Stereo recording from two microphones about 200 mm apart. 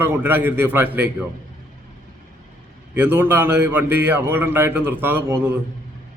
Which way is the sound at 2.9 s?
10° right (ahead or behind).